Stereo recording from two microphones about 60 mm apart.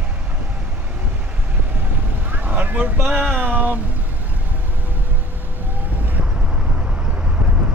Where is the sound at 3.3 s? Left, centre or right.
Right.